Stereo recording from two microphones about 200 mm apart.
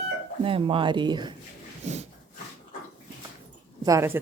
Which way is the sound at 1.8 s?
35° right (ahead or behind).